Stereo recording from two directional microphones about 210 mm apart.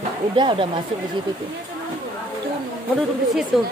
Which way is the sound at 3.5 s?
Centre (ahead or behind).